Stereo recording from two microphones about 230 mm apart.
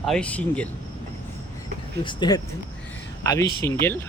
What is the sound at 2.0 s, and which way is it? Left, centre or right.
Speech, centre.